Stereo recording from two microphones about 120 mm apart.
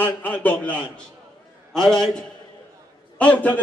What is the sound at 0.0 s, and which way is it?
A man's voice, 15° left (ahead or behind).